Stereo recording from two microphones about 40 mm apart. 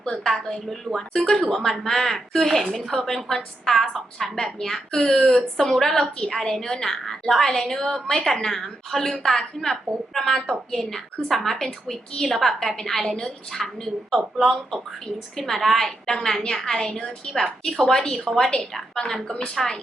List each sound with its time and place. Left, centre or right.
0.1 s a woman's voice: centre
7.0 s a woman's voice: centre